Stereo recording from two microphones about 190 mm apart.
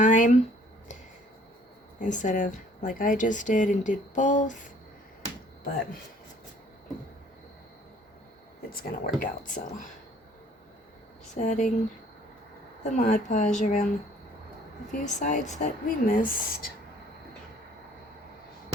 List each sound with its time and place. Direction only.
0.0 s a sound: 40° left (ahead or behind)
2.0 s a woman's voice: 40° left (ahead or behind)
8.7 s speech: 50° left (ahead or behind)
11.3 s a woman's voice: 40° left (ahead or behind)
12.8 s a woman's voice: 40° left (ahead or behind)
14.9 s speech: 40° left (ahead or behind)